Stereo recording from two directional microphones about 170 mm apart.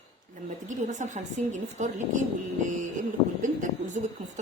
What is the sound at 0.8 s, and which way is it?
A woman's voice, 45° right (ahead or behind).